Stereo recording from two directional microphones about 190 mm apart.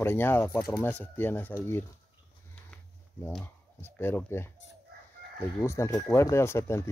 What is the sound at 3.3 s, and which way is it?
Speech, 5° left (ahead or behind).